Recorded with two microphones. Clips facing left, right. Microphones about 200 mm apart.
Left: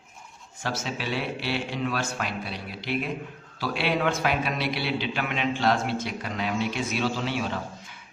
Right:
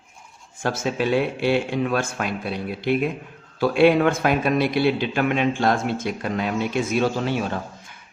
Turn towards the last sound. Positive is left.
turn(degrees=-50)  # may be behind; listen again after turning